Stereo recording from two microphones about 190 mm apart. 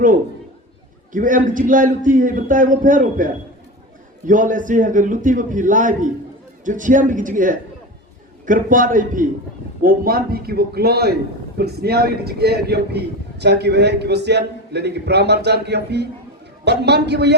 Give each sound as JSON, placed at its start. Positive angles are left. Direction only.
{"t": 1.1, "sound": "a man's voice", "side_deg": -45}
{"t": 4.3, "sound": "a man's voice", "side_deg": -45}